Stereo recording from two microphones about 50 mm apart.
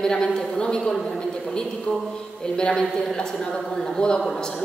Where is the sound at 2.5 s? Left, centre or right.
Centre.